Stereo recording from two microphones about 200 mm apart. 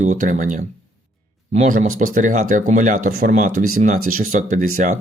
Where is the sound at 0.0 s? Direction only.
40° right (ahead or behind).